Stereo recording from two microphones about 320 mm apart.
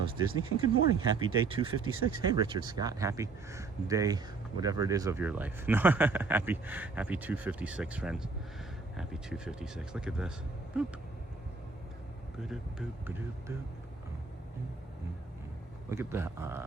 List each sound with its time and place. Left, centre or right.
0.0 s speech: centre
1.8 s speech: right
2.3 s speech: centre
12.4 s speech: centre
15.9 s speech: centre